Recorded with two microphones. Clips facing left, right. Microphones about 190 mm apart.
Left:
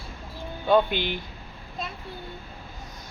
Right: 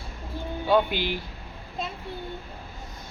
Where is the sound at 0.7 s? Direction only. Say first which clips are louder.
Left 1 dB; 5° right (ahead or behind).